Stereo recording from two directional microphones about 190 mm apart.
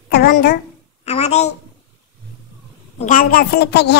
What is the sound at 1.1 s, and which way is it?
Speech, 35° left (ahead or behind).